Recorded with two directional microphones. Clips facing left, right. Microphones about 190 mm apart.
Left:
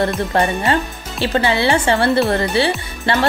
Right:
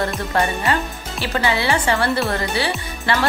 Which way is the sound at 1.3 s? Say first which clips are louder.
Left 4 dB; 25° left (ahead or behind).